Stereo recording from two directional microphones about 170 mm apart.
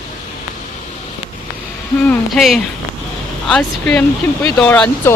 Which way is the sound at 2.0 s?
5° left (ahead or behind).